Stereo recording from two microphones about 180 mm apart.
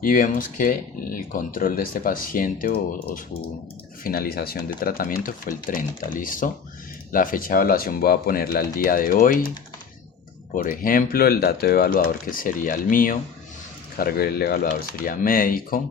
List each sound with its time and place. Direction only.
0.0 s speech: 50° left (ahead or behind)
4.0 s speech: 55° left (ahead or behind)
10.5 s speech: 50° left (ahead or behind)